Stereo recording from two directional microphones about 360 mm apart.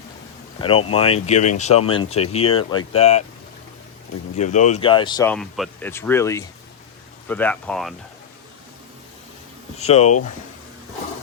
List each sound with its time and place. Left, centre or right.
0.6 s speech: centre
4.4 s speech: centre
9.7 s speech: centre